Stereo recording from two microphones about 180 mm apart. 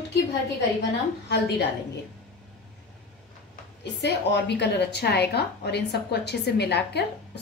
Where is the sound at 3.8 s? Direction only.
70° left (ahead or behind).